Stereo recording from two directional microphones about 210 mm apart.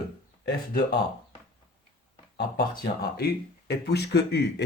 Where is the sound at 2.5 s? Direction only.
50° left (ahead or behind).